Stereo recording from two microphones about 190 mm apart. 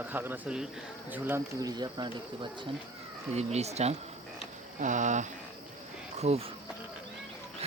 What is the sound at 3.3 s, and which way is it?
Speech, 35° right (ahead or behind).